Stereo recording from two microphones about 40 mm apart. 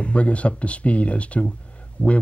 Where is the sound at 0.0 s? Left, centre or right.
Left.